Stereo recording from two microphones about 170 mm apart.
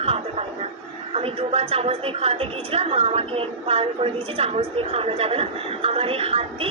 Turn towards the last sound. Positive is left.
turn(degrees=-35)  # may be behind; listen again after turning